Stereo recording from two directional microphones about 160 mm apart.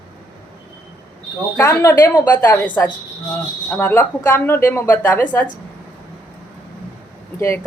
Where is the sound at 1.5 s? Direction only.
20° left (ahead or behind).